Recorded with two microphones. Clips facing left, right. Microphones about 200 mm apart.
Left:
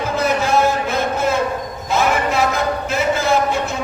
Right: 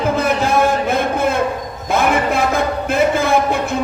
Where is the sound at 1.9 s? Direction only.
55° right (ahead or behind).